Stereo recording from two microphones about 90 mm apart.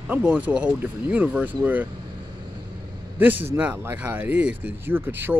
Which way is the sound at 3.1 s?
20° right (ahead or behind).